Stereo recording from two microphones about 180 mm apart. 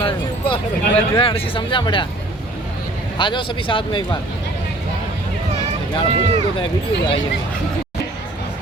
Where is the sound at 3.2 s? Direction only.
25° left (ahead or behind).